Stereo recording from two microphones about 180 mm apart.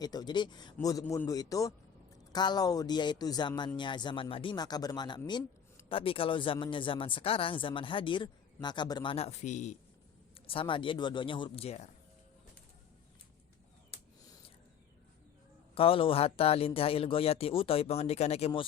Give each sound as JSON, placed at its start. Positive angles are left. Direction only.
{"t": 0.0, "sound": "speech", "side_deg": 20}
{"t": 10.3, "sound": "speech", "side_deg": 30}
{"t": 15.7, "sound": "speech", "side_deg": 30}